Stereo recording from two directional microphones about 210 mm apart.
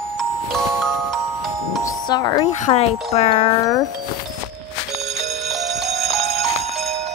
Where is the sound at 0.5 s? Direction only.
Centre (ahead or behind).